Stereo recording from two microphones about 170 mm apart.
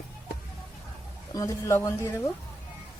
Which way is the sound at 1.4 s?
20° left (ahead or behind).